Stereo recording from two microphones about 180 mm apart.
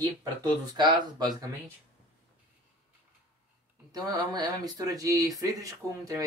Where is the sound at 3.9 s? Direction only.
20° right (ahead or behind).